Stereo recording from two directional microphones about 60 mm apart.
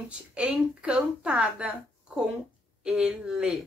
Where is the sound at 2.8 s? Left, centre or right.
Centre.